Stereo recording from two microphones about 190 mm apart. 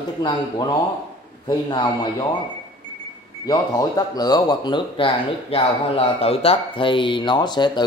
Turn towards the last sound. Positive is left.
turn(degrees=20)  # may be behind; listen again after turning